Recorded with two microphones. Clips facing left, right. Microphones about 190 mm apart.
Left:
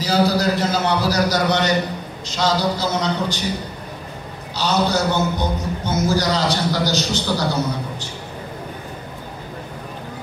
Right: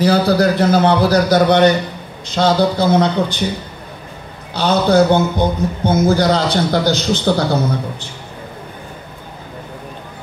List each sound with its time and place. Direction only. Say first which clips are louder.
0.0 s a man's voice: right 5 dB; 55° right (ahead or behind)
4.6 s a man's voice: right 7 dB; 55° right (ahead or behind)